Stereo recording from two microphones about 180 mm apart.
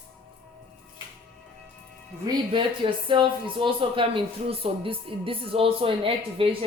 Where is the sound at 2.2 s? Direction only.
25° right (ahead or behind).